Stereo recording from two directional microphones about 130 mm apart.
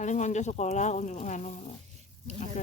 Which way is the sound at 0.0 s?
70° left (ahead or behind).